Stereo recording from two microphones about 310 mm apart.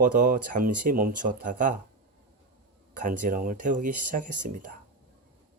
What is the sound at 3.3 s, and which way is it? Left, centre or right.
Speech, right.